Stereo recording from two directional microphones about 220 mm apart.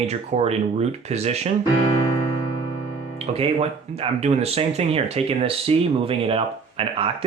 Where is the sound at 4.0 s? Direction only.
25° right (ahead or behind).